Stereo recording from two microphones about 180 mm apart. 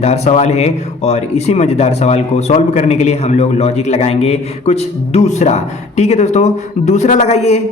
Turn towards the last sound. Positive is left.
turn(degrees=40)  # may be behind; listen again after turning